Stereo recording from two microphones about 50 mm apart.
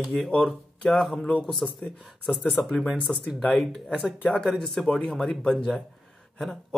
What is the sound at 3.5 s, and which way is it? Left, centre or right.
Speech, centre.